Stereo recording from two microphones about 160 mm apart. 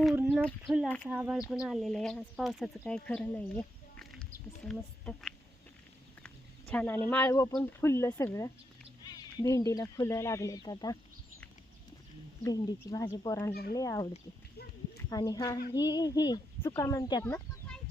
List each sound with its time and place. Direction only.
0.0 s a sound: centre (ahead or behind)
0.4 s speech: centre (ahead or behind); by 10.9 s 25° left (ahead or behind)
12.4 s speech: 20° left (ahead or behind)
13.5 s speech: 75° left (ahead or behind)
13.7 s speech: 20° left (ahead or behind)
15.1 s speech: 25° left (ahead or behind)
17.2 s chicken: 10° left (ahead or behind)